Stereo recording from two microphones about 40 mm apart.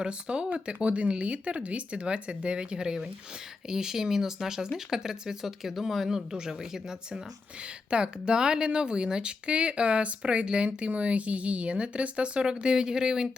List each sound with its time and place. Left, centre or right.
0.0 s a woman's voice: right; by 6.1 s centre
6.1 s a woman's voice: centre
7.9 s speech: right